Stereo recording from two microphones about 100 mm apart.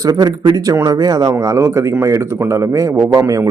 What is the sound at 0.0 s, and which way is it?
A man's voice, 35° right (ahead or behind).